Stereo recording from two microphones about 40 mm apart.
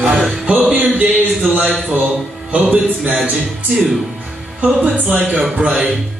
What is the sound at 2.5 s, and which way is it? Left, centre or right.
Music, right.